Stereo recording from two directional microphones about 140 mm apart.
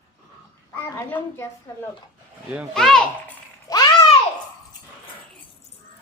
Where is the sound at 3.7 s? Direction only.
25° left (ahead or behind).